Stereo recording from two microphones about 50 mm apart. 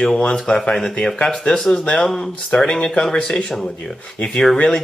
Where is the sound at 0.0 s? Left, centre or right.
Centre.